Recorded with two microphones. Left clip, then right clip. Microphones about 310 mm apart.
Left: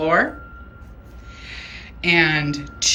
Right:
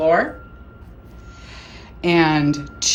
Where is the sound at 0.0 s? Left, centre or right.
Centre.